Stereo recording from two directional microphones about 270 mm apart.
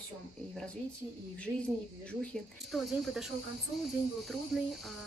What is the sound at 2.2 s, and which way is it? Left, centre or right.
Speech, centre.